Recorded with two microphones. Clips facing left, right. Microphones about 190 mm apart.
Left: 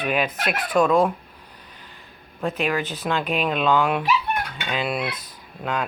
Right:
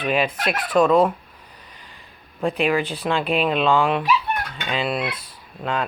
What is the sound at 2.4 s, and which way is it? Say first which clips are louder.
Speech: right 3 dB; centre (ahead or behind).